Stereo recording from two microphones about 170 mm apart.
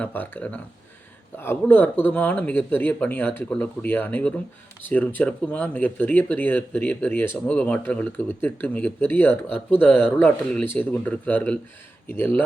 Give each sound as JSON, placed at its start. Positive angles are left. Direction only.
{"t": 0.0, "sound": "speech", "side_deg": 10}